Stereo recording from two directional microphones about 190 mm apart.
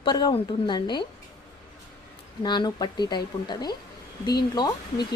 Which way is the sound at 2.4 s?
25° left (ahead or behind).